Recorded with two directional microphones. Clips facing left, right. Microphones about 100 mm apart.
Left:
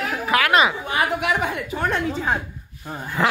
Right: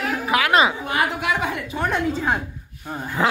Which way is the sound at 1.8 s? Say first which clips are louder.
Right 1 dB; centre (ahead or behind).